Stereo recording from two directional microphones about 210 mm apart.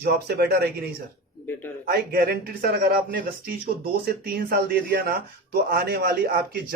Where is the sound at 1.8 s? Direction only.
45° right (ahead or behind).